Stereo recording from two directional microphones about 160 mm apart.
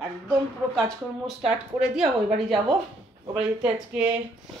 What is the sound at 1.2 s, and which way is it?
Speech, 5° right (ahead or behind).